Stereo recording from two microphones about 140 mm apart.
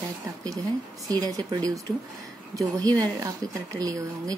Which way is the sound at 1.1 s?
25° right (ahead or behind).